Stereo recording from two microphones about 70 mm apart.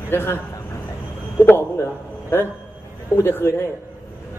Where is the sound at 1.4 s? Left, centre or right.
Left.